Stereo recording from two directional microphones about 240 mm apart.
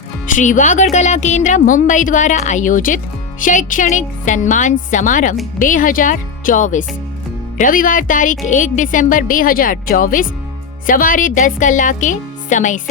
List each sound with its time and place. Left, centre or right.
0.3 s speech: left